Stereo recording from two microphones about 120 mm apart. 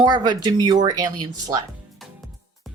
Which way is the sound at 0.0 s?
35° right (ahead or behind).